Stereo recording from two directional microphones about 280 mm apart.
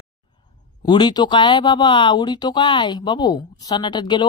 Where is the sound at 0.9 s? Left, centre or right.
Centre.